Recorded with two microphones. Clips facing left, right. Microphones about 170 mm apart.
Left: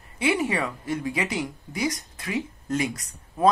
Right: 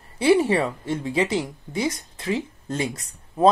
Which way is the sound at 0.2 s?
30° right (ahead or behind).